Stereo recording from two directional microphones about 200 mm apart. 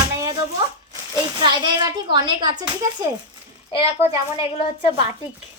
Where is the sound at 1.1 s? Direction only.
20° right (ahead or behind).